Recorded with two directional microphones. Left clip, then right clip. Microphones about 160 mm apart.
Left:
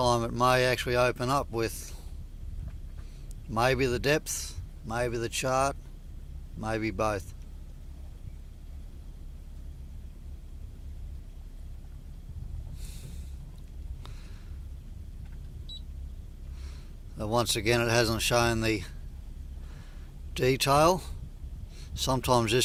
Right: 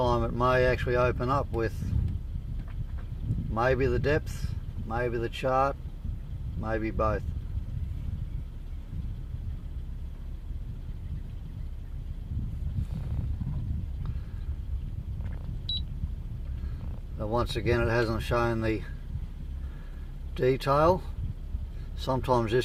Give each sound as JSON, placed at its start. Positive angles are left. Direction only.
{"t": 0.0, "sound": "speech", "side_deg": 40}
{"t": 3.5, "sound": "speech", "side_deg": 35}
{"t": 17.2, "sound": "speech", "side_deg": 40}
{"t": 20.3, "sound": "speech", "side_deg": 40}
{"t": 22.0, "sound": "speech", "side_deg": 35}